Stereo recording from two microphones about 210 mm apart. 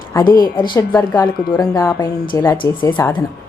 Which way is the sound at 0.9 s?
15° left (ahead or behind).